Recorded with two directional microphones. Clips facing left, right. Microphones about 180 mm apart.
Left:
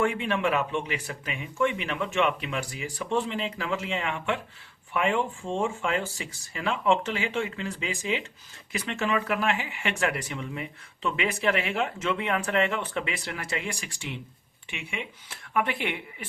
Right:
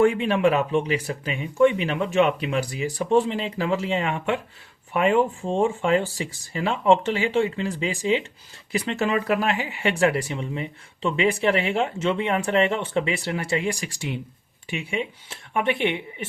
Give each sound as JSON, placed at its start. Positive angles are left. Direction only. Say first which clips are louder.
{"t": 0.0, "sound": "speech", "louder": "right 7 dB", "side_deg": -35}